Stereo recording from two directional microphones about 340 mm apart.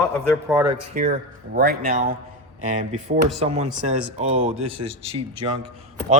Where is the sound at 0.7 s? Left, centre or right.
Right.